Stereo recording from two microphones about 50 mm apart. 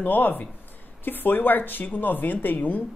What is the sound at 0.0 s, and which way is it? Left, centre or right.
Speech, left.